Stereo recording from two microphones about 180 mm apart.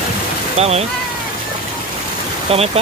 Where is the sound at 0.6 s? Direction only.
35° right (ahead or behind).